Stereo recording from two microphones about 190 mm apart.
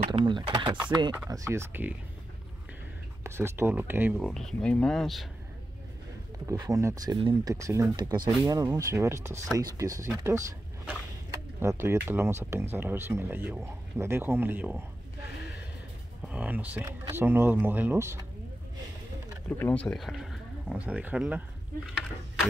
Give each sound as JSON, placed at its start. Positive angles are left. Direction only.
{"t": 0.1, "sound": "speech", "side_deg": -25}
{"t": 1.1, "sound": "speech", "side_deg": -15}
{"t": 3.3, "sound": "speech", "side_deg": -15}
{"t": 4.2, "sound": "speech", "side_deg": 0}
{"t": 6.4, "sound": "speech", "side_deg": -20}
{"t": 11.6, "sound": "speech", "side_deg": -15}
{"t": 16.3, "sound": "speech", "side_deg": -10}
{"t": 19.6, "sound": "speech", "side_deg": 5}